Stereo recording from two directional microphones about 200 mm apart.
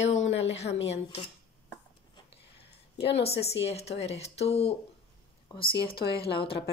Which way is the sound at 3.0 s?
30° left (ahead or behind).